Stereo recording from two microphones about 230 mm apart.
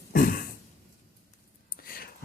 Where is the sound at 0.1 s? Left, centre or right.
Left.